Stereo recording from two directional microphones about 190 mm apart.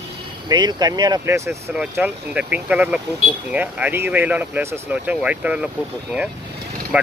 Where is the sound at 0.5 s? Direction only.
20° right (ahead or behind).